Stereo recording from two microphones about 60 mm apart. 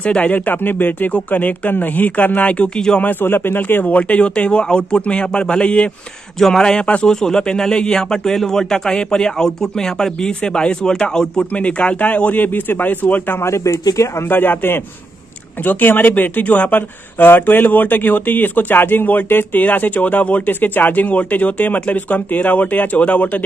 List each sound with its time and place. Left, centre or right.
0.0 s speech: left
3.0 s speech: left
13.4 s speech: left
14.3 s speech: left